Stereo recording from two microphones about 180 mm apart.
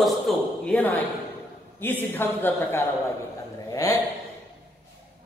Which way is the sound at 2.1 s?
10° left (ahead or behind).